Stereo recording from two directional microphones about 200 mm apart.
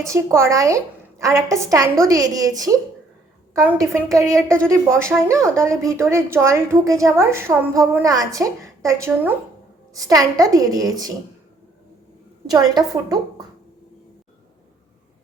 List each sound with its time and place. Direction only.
0.0 s a woman's voice: 15° right (ahead or behind)
12.7 s a woman's voice: 20° right (ahead or behind)